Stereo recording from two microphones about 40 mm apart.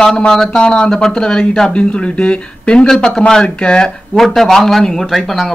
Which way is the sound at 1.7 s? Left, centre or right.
Left.